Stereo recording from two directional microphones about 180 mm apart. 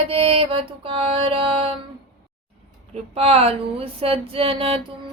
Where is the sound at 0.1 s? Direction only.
30° right (ahead or behind).